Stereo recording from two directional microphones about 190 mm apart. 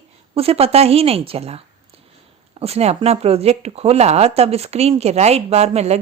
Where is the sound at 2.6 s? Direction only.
35° right (ahead or behind).